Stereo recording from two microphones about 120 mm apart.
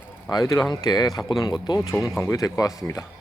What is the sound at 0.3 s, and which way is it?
Speech, 30° left (ahead or behind).